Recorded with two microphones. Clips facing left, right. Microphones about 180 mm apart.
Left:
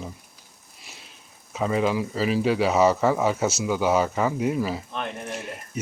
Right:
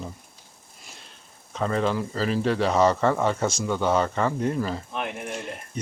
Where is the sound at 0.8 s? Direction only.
5° left (ahead or behind).